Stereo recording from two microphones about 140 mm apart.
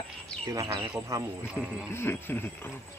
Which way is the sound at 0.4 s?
25° right (ahead or behind).